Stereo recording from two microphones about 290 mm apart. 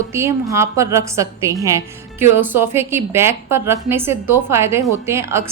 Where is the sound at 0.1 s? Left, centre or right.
Centre.